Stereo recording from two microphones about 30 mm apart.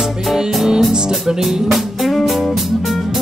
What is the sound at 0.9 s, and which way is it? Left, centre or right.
Music, centre.